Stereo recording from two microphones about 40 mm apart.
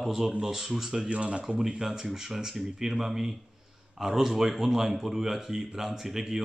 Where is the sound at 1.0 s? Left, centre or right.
Right.